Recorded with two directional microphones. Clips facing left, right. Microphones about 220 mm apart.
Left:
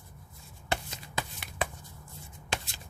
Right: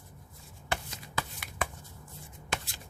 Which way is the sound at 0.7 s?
25° left (ahead or behind).